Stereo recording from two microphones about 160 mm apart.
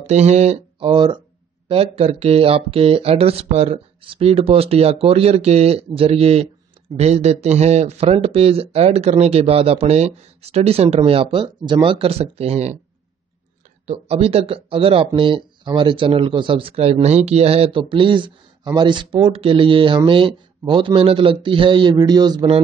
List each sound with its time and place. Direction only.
0.0 s speech: 45° right (ahead or behind)
13.8 s speech: 40° right (ahead or behind)